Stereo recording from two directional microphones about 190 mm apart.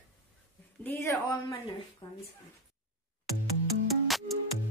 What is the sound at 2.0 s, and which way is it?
Speech, 25° left (ahead or behind).